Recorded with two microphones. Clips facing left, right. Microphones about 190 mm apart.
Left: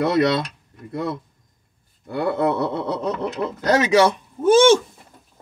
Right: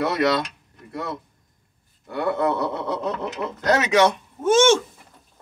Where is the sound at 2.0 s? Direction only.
30° left (ahead or behind).